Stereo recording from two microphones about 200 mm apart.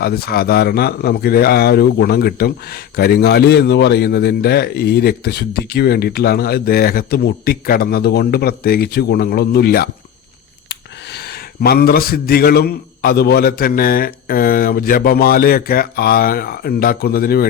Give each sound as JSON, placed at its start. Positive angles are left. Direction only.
{"t": 0.0, "sound": "speech", "side_deg": 50}